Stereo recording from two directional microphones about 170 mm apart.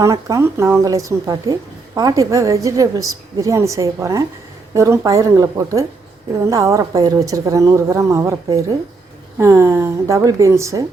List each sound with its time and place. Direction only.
0.0 s a woman's voice: 20° right (ahead or behind)